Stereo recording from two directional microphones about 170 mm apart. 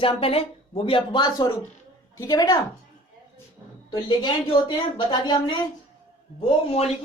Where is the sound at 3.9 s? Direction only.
25° left (ahead or behind).